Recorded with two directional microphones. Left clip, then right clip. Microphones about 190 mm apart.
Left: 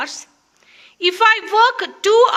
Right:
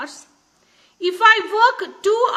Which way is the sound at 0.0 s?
25° left (ahead or behind).